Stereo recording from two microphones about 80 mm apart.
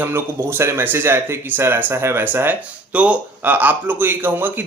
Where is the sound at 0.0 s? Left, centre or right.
Right.